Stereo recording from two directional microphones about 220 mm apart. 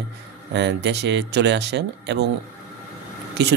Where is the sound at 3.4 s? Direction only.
50° right (ahead or behind).